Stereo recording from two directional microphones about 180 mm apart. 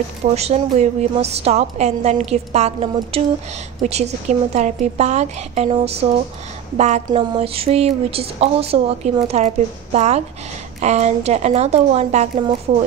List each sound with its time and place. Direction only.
0.3 s speech: 35° right (ahead or behind)